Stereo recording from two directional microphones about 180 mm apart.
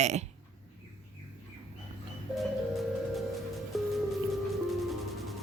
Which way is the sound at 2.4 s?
Centre (ahead or behind).